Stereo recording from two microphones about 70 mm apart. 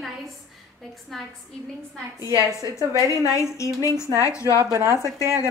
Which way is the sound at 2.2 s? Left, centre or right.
Left.